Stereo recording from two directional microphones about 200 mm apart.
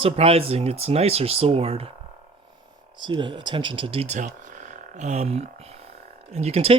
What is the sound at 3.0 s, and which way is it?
Speech, 25° right (ahead or behind).